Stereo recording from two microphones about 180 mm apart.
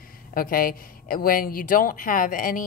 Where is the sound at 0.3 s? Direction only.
50° left (ahead or behind).